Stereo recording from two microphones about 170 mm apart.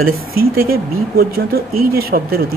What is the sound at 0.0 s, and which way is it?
Speech, 60° right (ahead or behind).